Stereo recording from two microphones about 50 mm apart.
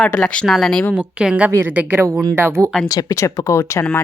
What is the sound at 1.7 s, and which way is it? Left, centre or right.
Speech, right.